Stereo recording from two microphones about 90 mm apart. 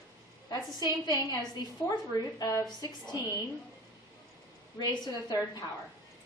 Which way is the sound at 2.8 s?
50° left (ahead or behind).